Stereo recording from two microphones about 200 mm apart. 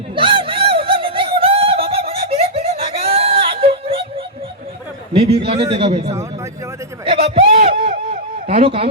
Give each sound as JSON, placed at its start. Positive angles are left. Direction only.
{"t": 0.2, "sound": "snicker", "side_deg": -25}
{"t": 5.1, "sound": "a man's voice", "side_deg": -30}